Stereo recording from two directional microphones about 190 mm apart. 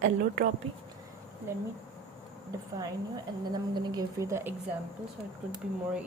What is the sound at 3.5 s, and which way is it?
A woman's voice, 20° right (ahead or behind).